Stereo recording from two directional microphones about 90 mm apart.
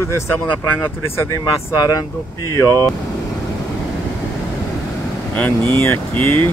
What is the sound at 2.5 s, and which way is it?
Speech, 35° left (ahead or behind).